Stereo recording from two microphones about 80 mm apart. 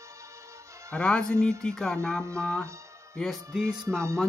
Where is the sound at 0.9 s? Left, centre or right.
Centre.